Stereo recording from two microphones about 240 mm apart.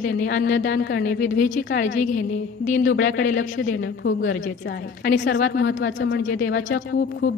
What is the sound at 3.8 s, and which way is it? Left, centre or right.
A woman's voice, left.